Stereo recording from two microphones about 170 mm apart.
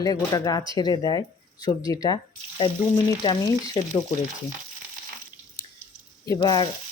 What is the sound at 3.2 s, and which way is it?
Speech, 25° left (ahead or behind).